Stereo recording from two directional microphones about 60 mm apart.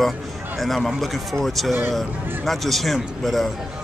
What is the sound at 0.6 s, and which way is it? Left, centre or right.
Speech, centre.